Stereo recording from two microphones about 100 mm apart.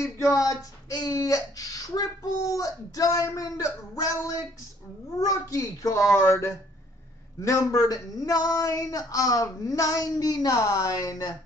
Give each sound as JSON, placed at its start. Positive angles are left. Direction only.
{"t": 0.0, "sound": "speech", "side_deg": 30}